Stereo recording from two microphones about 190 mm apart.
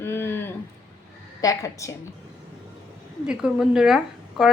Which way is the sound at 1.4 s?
15° left (ahead or behind).